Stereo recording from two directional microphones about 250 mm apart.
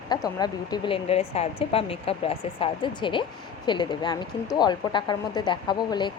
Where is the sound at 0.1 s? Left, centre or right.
Centre.